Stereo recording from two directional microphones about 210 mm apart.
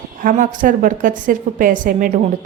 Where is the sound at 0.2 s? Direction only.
40° right (ahead or behind).